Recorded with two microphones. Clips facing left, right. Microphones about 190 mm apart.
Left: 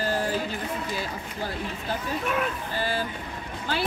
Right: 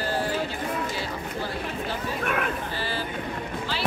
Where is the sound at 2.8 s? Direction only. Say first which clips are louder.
Left 3 dB; 50° left (ahead or behind).